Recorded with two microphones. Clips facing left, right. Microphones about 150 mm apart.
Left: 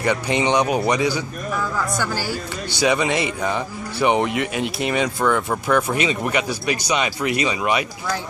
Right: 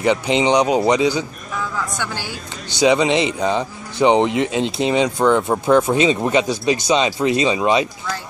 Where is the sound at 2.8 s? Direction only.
20° right (ahead or behind).